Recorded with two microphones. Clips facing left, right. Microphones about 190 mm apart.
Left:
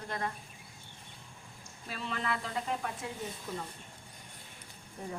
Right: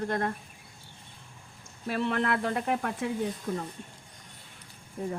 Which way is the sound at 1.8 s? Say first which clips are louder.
Right 9 dB; 60° right (ahead or behind).